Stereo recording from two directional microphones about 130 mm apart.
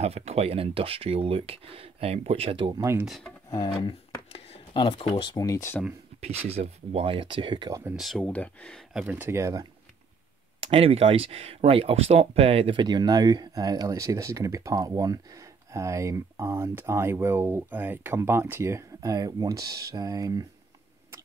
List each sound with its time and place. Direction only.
0.0 s speech: 55° right (ahead or behind)
3.4 s speech: 35° left (ahead or behind)
6.2 s speech: 55° right (ahead or behind); by 7.8 s 35° right (ahead or behind)
8.0 s speech: centre (ahead or behind)
8.9 s speech: 15° right (ahead or behind)
10.6 s speech: 45° right (ahead or behind)
12.8 s speech: 35° right (ahead or behind)